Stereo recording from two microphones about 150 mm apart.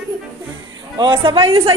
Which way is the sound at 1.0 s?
35° right (ahead or behind).